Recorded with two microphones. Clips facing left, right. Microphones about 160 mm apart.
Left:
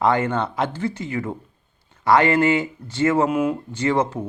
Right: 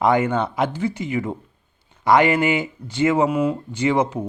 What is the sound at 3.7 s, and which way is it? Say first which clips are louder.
Speech: right 1 dB; 15° right (ahead or behind).